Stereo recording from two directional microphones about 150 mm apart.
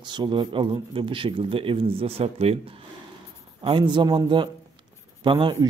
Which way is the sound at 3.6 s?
35° right (ahead or behind).